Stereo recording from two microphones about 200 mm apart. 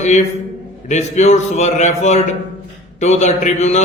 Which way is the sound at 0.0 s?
35° left (ahead or behind).